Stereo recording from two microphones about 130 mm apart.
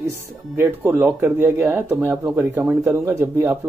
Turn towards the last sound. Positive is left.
turn(degrees=-20)  # may be behind; listen again after turning